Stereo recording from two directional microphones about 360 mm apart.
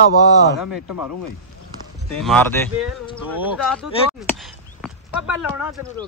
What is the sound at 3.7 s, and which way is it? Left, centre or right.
Speech, centre.